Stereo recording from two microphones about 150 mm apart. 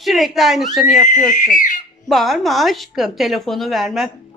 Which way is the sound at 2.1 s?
Centre (ahead or behind).